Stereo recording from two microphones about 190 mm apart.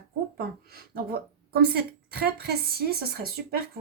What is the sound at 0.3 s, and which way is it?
A woman's voice, 55° right (ahead or behind).